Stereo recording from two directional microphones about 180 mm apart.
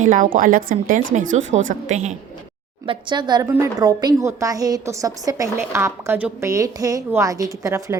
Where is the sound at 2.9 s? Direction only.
25° right (ahead or behind).